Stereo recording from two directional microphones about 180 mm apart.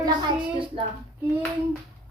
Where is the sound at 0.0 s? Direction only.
25° right (ahead or behind).